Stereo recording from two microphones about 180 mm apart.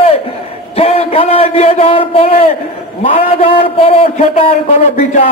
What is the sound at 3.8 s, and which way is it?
A man's voice, 35° left (ahead or behind).